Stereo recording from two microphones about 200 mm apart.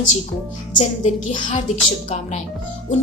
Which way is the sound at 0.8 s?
40° left (ahead or behind).